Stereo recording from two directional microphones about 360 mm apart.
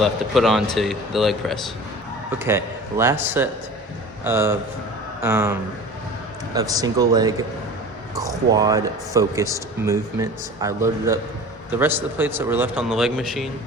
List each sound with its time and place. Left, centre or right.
0.0 s a man's voice: centre